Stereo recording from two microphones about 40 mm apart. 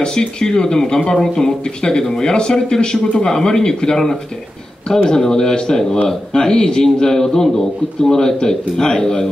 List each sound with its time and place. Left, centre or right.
0.0 s speech: centre